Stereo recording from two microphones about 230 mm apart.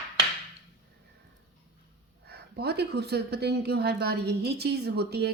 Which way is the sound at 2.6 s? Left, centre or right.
Right.